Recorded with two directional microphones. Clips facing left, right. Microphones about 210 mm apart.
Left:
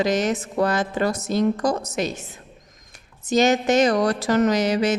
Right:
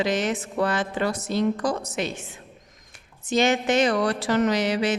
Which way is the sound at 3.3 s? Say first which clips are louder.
Left 3 dB; 40° left (ahead or behind).